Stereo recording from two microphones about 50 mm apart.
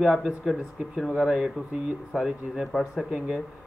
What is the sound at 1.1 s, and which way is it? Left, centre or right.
A man's voice, right.